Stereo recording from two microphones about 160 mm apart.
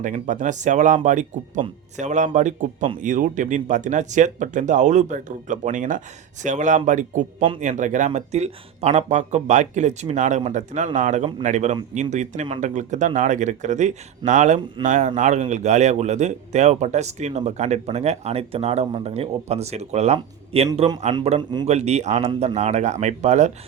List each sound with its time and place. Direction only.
0.0 s speech: 50° right (ahead or behind)
21.7 s speech: 45° right (ahead or behind)